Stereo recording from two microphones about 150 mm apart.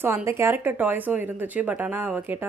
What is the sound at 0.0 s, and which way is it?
Speech, 20° right (ahead or behind).